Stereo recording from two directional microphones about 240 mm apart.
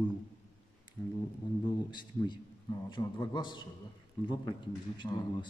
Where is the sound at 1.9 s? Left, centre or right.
Centre.